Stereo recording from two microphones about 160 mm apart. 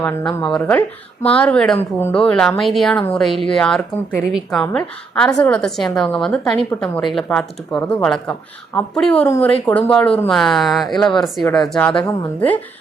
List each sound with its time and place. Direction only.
0.0 s a woman's voice: 15° left (ahead or behind)